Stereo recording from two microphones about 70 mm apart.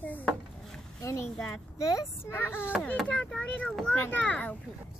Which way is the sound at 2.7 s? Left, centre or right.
Centre.